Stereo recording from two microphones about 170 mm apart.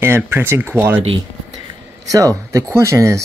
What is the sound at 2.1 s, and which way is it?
Speech, 20° right (ahead or behind).